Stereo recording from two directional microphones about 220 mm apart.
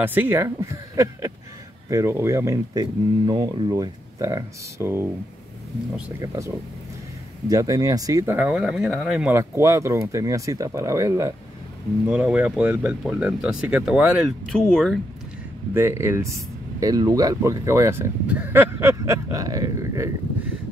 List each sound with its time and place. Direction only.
0.0 s speech: 10° right (ahead or behind)
6.2 s speech: 15° right (ahead or behind); by 15.0 s 5° left (ahead or behind)
15.7 s speech: 10° right (ahead or behind)